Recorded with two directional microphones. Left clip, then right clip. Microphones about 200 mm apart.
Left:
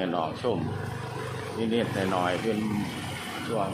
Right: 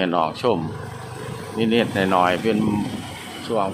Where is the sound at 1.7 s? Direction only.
35° right (ahead or behind).